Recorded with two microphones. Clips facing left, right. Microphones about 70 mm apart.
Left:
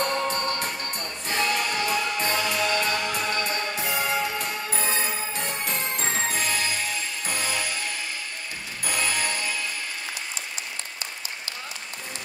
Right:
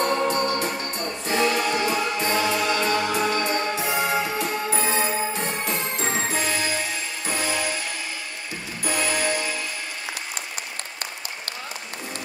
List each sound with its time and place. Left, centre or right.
0.0 s music: right
8.8 s music: right